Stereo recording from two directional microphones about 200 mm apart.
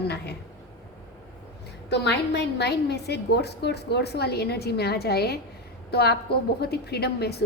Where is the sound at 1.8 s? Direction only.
55° left (ahead or behind).